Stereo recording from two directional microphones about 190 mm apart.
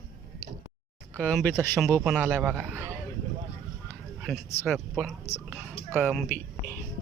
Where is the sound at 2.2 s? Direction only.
15° right (ahead or behind).